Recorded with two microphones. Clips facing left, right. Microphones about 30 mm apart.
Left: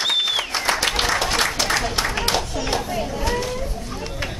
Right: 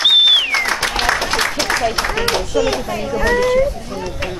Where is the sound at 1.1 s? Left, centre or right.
Centre.